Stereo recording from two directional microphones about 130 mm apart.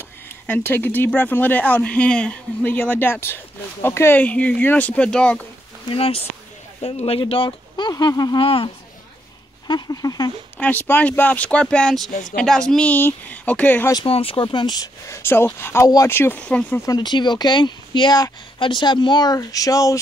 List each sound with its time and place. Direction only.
0.5 s speech: 15° left (ahead or behind)
5.9 s speech: 45° left (ahead or behind); by 8.4 s 30° left (ahead or behind)
8.4 s speech: 45° left (ahead or behind)
9.7 s speech: 30° left (ahead or behind)
10.6 s speech: 10° left (ahead or behind)
12.1 s speech: 75° left (ahead or behind)
12.4 s speech: 5° left (ahead or behind)
14.0 s speech: 45° left (ahead or behind); by 16.8 s 10° left (ahead or behind)
16.8 s speech: 30° left (ahead or behind)